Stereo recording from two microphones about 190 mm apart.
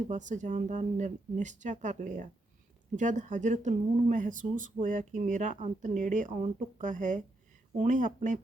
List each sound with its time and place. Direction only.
0.1 s speech: 40° right (ahead or behind)